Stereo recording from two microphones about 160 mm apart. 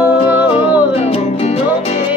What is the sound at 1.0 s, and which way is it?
Music, 40° left (ahead or behind).